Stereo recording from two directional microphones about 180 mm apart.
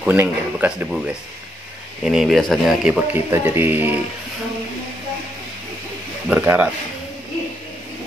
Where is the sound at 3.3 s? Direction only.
10° right (ahead or behind).